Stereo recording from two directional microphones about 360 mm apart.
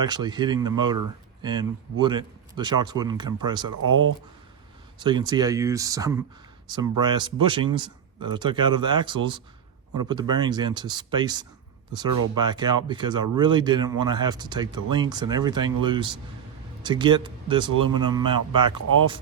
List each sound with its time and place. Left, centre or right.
0.0 s speech: centre
4.9 s speech: centre